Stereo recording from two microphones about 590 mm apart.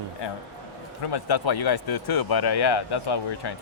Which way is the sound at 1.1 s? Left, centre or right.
Left.